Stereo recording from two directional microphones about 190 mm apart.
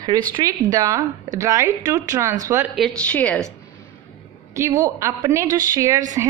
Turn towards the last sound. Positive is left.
turn(degrees=-20)  # may be behind; listen again after turning